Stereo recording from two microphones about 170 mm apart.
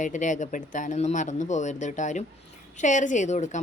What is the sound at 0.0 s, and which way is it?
Speech, 45° left (ahead or behind).